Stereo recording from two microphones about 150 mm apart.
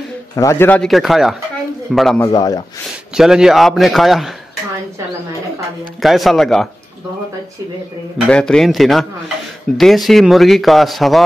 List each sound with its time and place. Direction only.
0.4 s speech: 20° left (ahead or behind); by 1.3 s centre (ahead or behind)
2.1 s a man's voice: 20° left (ahead or behind)
3.2 s speech: 5° right (ahead or behind)
6.0 s speech: centre (ahead or behind)
8.3 s speech: 5° left (ahead or behind)